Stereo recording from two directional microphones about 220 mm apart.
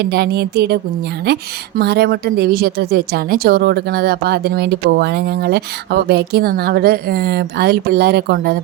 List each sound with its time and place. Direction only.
0.0 s a woman's voice: 50° right (ahead or behind)